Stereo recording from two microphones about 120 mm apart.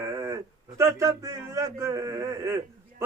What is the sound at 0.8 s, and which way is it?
A man's voice, 25° right (ahead or behind).